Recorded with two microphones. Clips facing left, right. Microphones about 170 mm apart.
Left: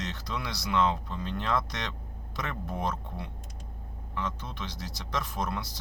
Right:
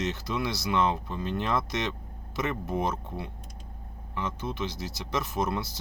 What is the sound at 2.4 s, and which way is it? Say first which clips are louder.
Speech: right 6 dB; 20° right (ahead or behind).